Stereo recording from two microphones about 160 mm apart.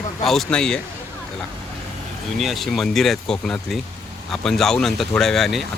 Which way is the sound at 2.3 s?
Centre (ahead or behind).